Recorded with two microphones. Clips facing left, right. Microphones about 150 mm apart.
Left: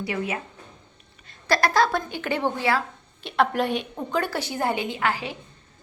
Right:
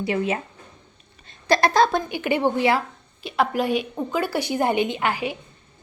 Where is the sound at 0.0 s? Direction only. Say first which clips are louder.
Right 5 dB; 25° right (ahead or behind).